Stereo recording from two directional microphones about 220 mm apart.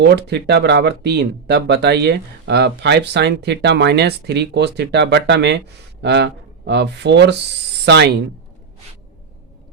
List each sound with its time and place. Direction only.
0.0 s speech: 50° right (ahead or behind)